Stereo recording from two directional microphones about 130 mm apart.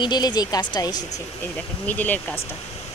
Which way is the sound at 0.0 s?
35° left (ahead or behind).